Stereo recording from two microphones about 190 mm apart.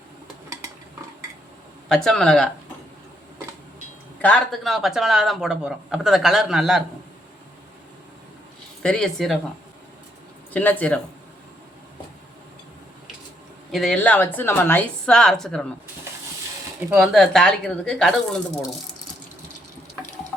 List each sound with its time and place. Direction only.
1.9 s speech: centre (ahead or behind)
4.2 s speech: 5° left (ahead or behind)
8.8 s speech: 5° left (ahead or behind)
10.5 s speech: 10° left (ahead or behind)
13.7 s speech: centre (ahead or behind)
16.8 s speech: 5° right (ahead or behind)